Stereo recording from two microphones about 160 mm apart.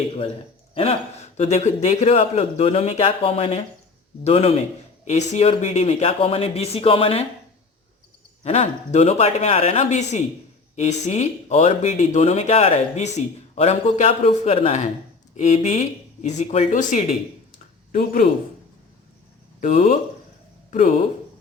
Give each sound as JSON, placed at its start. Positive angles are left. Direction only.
{"t": 0.7, "sound": "a man's voice", "side_deg": 40}
{"t": 8.4, "sound": "a man's voice", "side_deg": 40}
{"t": 17.9, "sound": "speech", "side_deg": 65}
{"t": 19.5, "sound": "speech", "side_deg": 60}